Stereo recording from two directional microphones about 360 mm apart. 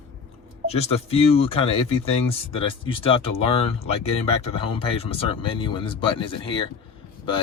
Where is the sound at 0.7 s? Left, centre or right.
Centre.